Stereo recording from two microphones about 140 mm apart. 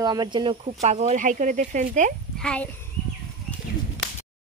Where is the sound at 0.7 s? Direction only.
55° right (ahead or behind).